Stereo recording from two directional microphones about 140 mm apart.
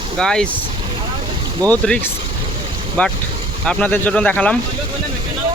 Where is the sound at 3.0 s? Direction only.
10° left (ahead or behind).